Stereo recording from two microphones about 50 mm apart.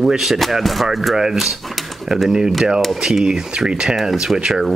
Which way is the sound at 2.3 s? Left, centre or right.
Centre.